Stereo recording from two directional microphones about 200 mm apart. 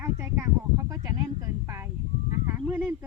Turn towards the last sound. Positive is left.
turn(degrees=-10)  # may be behind; listen again after turning